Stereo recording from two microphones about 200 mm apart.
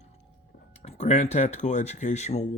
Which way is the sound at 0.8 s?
30° left (ahead or behind).